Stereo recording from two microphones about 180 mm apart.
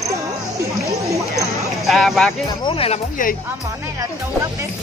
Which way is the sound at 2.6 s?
30° left (ahead or behind).